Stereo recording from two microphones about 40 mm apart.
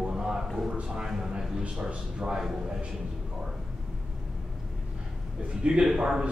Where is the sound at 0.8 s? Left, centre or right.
Centre.